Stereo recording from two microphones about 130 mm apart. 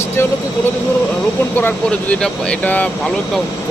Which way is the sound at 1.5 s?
15° left (ahead or behind).